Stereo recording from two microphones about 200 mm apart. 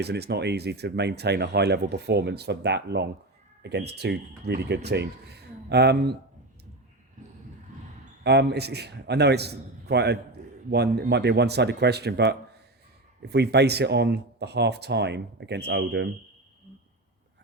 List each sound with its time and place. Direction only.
0.0 s speech: 55° right (ahead or behind)
8.2 s speech: 55° right (ahead or behind)